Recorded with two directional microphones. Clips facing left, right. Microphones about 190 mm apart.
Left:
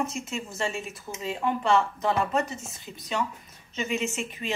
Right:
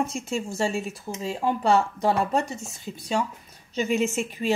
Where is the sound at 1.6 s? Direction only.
35° right (ahead or behind).